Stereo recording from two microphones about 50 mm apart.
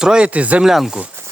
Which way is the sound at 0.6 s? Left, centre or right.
Centre.